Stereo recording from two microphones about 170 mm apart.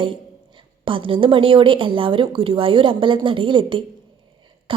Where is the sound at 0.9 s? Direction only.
30° right (ahead or behind).